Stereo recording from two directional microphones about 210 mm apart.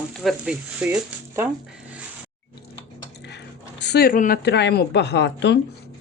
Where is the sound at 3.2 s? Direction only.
55° left (ahead or behind).